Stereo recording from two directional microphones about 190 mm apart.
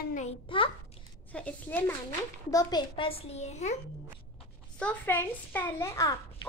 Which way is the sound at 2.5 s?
25° left (ahead or behind).